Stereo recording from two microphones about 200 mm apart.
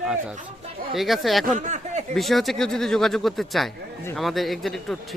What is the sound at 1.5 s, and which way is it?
Speech, 35° right (ahead or behind).